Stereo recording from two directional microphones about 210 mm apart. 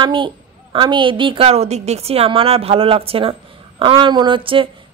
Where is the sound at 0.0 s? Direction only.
25° right (ahead or behind).